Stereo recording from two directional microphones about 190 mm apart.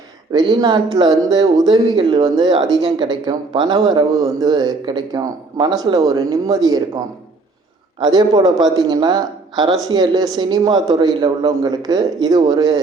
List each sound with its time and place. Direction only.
0.3 s speech: 20° right (ahead or behind)